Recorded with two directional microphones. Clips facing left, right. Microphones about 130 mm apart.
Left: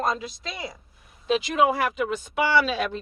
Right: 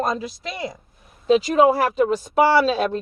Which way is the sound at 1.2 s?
40° right (ahead or behind).